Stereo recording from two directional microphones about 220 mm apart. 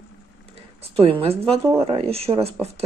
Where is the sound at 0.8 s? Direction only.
25° right (ahead or behind).